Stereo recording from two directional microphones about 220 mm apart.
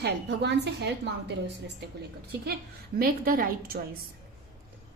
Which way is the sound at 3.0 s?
40° right (ahead or behind).